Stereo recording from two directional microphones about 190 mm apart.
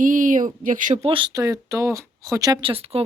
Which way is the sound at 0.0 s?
45° right (ahead or behind).